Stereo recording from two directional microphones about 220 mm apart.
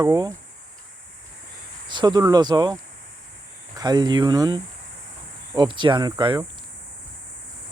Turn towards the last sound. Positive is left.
turn(degrees=-15)  # may be behind; listen again after turning